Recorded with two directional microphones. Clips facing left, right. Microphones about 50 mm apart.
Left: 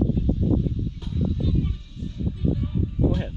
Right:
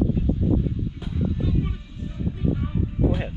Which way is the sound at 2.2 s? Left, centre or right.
Right.